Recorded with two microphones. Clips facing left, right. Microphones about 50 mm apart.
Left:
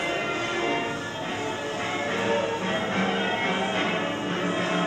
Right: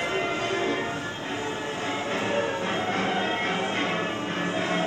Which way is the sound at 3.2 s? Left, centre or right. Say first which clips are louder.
Left 1 dB; centre.